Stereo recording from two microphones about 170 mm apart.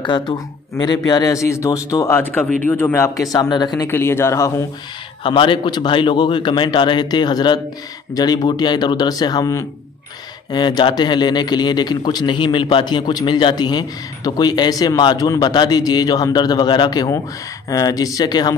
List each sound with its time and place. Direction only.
0.0 s a man's voice: 25° left (ahead or behind)
5.2 s a man's voice: 30° left (ahead or behind)